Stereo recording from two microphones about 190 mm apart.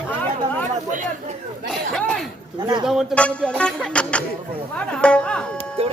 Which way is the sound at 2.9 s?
Centre (ahead or behind).